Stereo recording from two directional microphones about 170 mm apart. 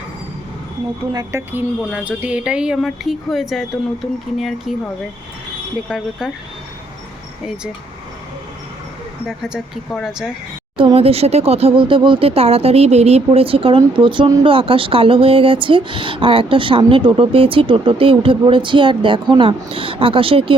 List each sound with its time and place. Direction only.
1.1 s speech: 15° right (ahead or behind)
5.9 s speech: centre (ahead or behind)
7.4 s speech: 5° right (ahead or behind)
9.2 s speech: 5° right (ahead or behind)
10.8 s speech: 30° right (ahead or behind)